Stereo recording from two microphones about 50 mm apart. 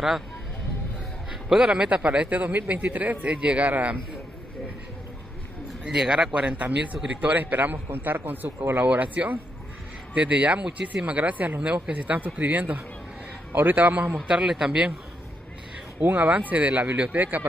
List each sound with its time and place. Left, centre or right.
1.5 s a man's voice: centre; by 4.0 s right
5.9 s a man's voice: centre; by 14.0 s right
14.1 s a man's voice: centre
16.0 s speech: right